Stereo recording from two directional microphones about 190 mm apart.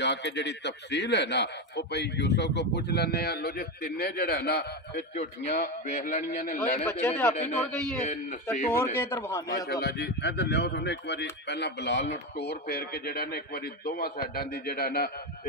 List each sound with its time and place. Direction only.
0.0 s a man's voice: 65° left (ahead or behind)
5.1 s a man's voice: 35° left (ahead or behind)
7.0 s a man's voice: 10° left (ahead or behind)
8.0 s speech: 45° left (ahead or behind)
8.9 s a man's voice: 10° left (ahead or behind)
9.7 s a man's voice: 60° left (ahead or behind)
12.4 s a man's voice: 55° left (ahead or behind)